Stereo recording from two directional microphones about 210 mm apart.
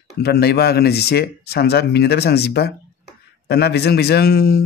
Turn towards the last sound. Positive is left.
turn(degrees=50)  # may be behind; listen again after turning